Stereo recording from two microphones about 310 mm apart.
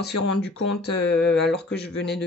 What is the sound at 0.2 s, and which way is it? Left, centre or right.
Speech, left.